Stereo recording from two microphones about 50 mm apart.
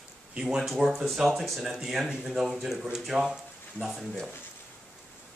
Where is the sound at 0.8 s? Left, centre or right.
Centre.